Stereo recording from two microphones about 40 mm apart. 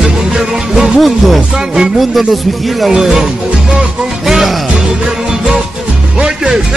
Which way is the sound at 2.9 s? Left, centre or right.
Centre.